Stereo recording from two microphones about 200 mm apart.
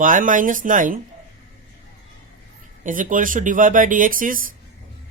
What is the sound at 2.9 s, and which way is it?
Speech, 40° right (ahead or behind).